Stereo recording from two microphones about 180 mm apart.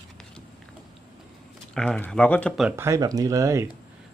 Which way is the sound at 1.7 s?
5° left (ahead or behind).